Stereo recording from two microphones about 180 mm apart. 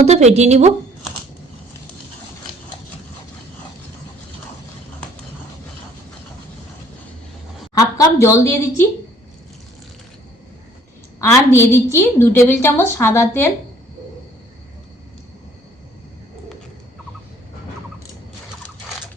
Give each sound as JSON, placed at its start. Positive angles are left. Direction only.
{"t": 0.0, "sound": "a woman's voice", "side_deg": -40}
{"t": 7.8, "sound": "a woman's voice", "side_deg": 15}
{"t": 11.2, "sound": "a woman's voice", "side_deg": 15}